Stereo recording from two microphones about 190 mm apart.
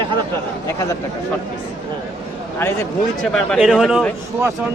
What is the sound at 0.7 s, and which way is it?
Speech, 15° left (ahead or behind).